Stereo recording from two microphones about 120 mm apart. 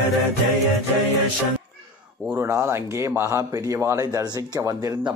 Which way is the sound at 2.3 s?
20° right (ahead or behind).